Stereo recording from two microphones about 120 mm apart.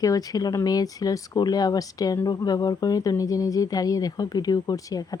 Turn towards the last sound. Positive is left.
turn(degrees=30)  # may be behind; listen again after turning